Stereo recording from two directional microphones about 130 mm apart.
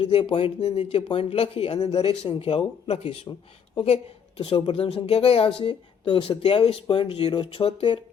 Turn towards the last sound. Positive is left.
turn(degrees=40)  # may be behind; listen again after turning